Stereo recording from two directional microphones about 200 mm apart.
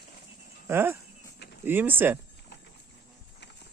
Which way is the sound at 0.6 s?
10° right (ahead or behind).